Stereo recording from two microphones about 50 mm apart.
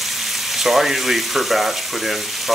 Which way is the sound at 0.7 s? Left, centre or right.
Centre.